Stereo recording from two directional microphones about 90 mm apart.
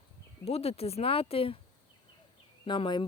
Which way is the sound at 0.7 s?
90° left.